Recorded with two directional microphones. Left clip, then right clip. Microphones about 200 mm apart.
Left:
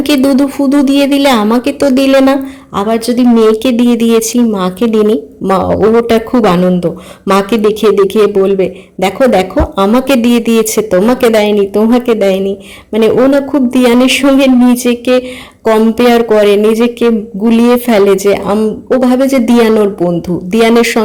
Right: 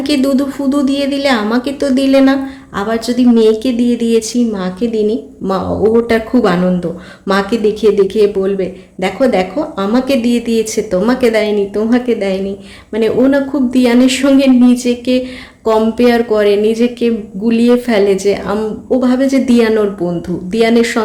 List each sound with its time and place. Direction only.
0.0 s a woman's voice: 30° left (ahead or behind)
14.8 s speech: 5° right (ahead or behind)
15.6 s a woman's voice: 35° left (ahead or behind)